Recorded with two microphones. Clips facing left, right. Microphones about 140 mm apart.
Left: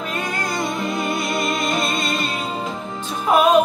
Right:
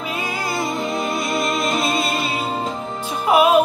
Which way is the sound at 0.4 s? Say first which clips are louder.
Right 1 dB; centre (ahead or behind).